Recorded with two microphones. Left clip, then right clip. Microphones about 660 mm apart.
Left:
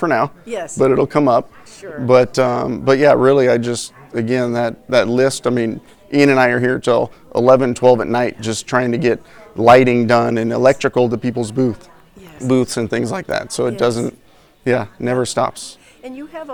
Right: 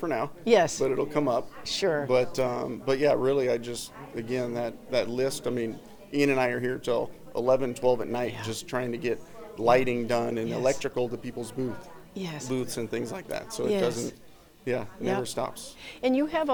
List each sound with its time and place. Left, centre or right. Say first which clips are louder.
0.0 s speech: left 14 dB; left
0.4 s a woman's voice: right 4 dB; right
0.8 s speech: left 13 dB; left
16.0 s a woman's voice: right 5 dB; right